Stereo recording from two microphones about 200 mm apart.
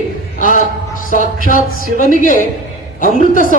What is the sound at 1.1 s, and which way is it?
A woman's voice, 40° left (ahead or behind).